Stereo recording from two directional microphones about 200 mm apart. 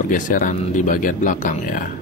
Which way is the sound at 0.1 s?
40° left (ahead or behind).